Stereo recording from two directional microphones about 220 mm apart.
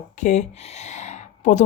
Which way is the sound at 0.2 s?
30° left (ahead or behind).